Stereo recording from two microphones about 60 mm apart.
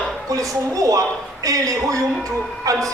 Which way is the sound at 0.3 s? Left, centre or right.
Right.